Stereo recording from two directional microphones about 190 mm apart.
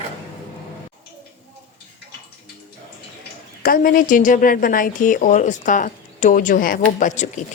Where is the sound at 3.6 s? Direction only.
50° left (ahead or behind).